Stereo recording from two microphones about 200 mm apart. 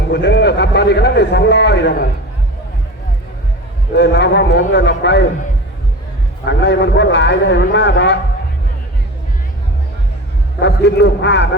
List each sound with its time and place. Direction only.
0.1 s a man's voice: 60° left (ahead or behind)
3.9 s a man's voice: 60° left (ahead or behind)
6.4 s a man's voice: 60° left (ahead or behind)
10.6 s a man's voice: 60° left (ahead or behind)